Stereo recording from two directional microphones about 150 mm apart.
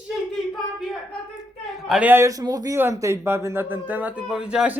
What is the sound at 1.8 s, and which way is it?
A man's voice, 5° right (ahead or behind).